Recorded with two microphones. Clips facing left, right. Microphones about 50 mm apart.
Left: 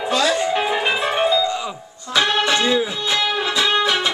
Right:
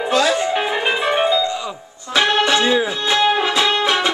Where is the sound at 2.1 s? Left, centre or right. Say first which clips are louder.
Right 2 dB; right.